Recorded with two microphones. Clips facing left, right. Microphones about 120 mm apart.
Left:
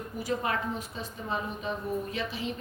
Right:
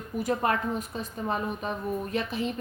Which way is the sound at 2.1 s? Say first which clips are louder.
Right 5 dB; 50° right (ahead or behind).